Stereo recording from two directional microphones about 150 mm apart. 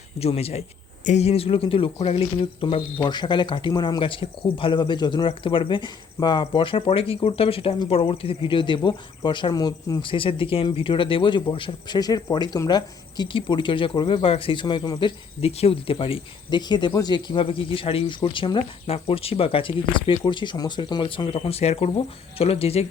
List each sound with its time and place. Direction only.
0.2 s speech: 40° left (ahead or behind)
15.4 s speech: 45° left (ahead or behind)